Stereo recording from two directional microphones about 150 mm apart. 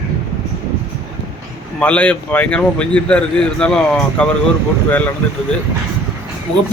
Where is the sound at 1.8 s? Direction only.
10° left (ahead or behind).